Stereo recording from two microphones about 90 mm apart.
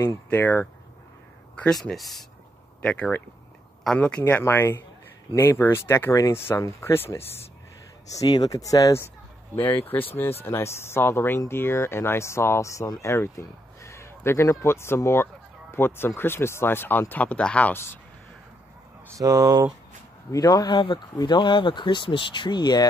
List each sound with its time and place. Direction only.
0.0 s speech: 25° left (ahead or behind)
1.5 s speech: 10° left (ahead or behind)
4.3 s speech: 25° left (ahead or behind)
8.1 s speech: 40° left (ahead or behind)
9.8 s speech: 20° left (ahead or behind)
19.0 s speech: 40° right (ahead or behind)
20.2 s speech: 45° left (ahead or behind)